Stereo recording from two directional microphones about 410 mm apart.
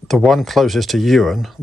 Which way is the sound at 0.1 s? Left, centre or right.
Centre.